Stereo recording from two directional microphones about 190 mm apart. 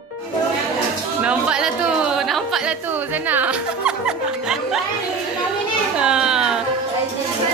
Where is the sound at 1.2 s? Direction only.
5° right (ahead or behind).